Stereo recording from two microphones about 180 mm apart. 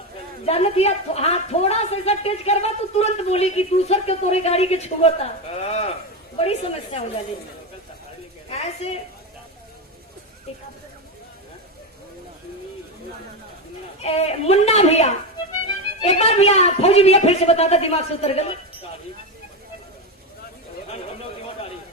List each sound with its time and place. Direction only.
0.4 s a woman's voice: 35° left (ahead or behind)
8.4 s a sound: 35° left (ahead or behind)
14.0 s a woman's voice: 35° left (ahead or behind)